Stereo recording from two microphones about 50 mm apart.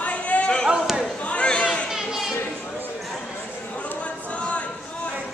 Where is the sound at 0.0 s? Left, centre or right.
Left.